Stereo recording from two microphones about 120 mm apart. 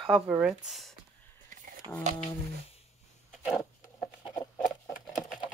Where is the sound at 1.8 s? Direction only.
45° right (ahead or behind).